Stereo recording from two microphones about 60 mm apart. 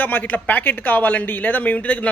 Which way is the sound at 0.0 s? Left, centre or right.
Left.